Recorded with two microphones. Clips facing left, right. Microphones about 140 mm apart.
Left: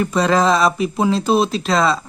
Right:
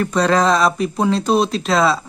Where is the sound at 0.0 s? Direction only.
Centre (ahead or behind).